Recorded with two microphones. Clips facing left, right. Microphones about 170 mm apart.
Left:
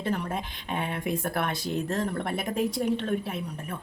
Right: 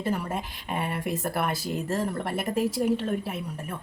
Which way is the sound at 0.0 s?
5° right (ahead or behind).